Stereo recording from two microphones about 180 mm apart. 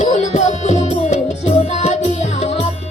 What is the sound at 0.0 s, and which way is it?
Music, 40° left (ahead or behind).